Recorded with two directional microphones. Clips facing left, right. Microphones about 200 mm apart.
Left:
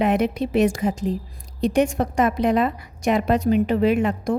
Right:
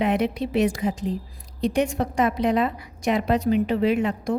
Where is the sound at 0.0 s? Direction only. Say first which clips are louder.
Left 2 dB; 45° left (ahead or behind).